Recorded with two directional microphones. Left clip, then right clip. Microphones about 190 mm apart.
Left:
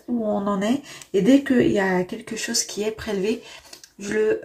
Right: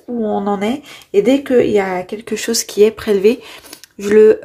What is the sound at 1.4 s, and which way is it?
Speech, 55° right (ahead or behind).